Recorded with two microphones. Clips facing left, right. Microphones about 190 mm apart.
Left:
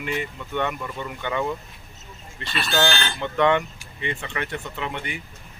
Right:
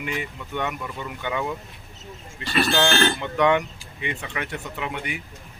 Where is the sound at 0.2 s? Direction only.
10° right (ahead or behind).